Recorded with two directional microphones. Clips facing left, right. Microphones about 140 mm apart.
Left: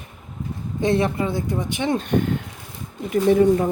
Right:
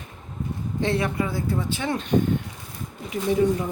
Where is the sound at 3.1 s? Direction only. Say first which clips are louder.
Left 6 dB; 55° left (ahead or behind).